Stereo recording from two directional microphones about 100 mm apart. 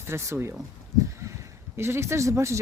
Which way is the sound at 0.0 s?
25° right (ahead or behind).